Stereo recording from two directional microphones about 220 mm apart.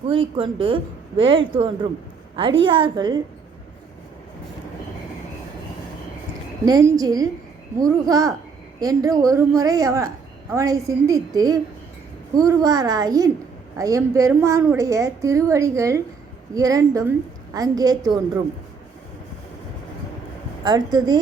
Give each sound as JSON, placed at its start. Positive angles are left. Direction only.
{"t": 0.1, "sound": "a woman's voice", "side_deg": -20}
{"t": 6.7, "sound": "a woman's voice", "side_deg": -15}
{"t": 20.7, "sound": "a woman's voice", "side_deg": -20}